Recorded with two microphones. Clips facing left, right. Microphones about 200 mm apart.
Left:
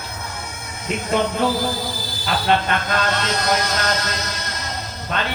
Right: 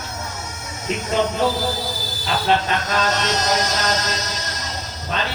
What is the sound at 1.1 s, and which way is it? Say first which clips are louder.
Speech: left 1 dB; 55° left (ahead or behind).